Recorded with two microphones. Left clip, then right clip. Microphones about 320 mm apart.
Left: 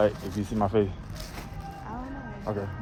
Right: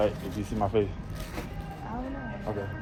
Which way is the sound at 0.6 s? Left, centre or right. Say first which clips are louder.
Left 2 dB; left.